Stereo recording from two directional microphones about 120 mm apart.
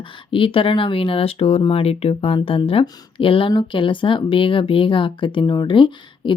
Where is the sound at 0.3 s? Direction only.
45° left (ahead or behind).